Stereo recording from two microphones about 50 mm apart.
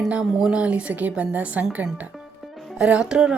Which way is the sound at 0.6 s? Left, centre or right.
Right.